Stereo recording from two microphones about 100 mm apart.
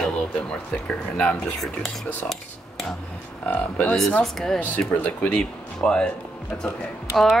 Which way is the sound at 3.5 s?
15° left (ahead or behind).